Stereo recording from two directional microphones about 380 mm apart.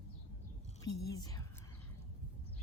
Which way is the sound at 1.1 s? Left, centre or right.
Centre.